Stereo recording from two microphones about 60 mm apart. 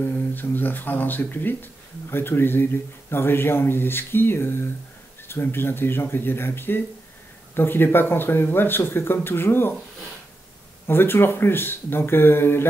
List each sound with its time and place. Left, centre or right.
0.0 s speech: left
10.9 s speech: left